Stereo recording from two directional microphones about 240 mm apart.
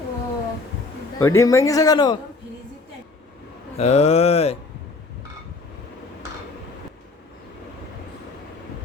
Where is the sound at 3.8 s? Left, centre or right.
Left.